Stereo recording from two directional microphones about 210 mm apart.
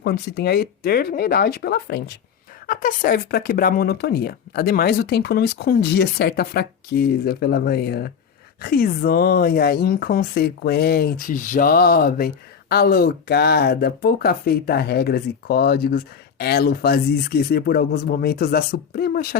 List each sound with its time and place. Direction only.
0.0 s speech: 50° left (ahead or behind)
2.6 s speech: 40° left (ahead or behind)